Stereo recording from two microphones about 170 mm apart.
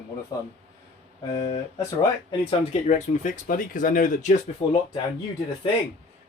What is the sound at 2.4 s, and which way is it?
Speech, 35° left (ahead or behind).